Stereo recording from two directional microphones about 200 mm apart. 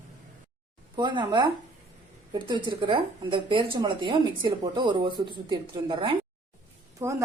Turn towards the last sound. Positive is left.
turn(degrees=-15)  # may be behind; listen again after turning